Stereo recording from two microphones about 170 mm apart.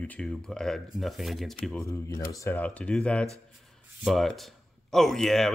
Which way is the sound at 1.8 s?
20° left (ahead or behind).